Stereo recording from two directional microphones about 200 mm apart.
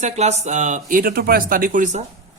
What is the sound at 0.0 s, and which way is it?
Speech, 35° right (ahead or behind).